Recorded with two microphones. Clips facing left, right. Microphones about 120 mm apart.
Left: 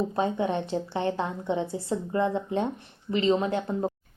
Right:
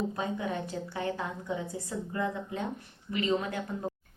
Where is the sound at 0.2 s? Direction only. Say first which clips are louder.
Left 7 dB; 30° left (ahead or behind).